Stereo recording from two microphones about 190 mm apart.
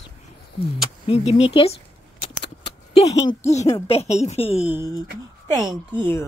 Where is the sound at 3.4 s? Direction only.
35° left (ahead or behind).